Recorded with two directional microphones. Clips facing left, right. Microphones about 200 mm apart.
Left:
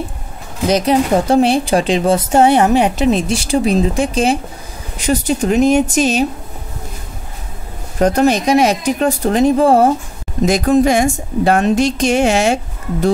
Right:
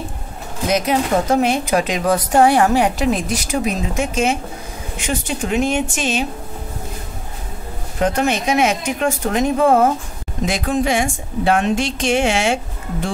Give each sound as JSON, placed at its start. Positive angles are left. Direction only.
{"t": 0.7, "sound": "speech", "side_deg": 30}
{"t": 8.0, "sound": "speech", "side_deg": 40}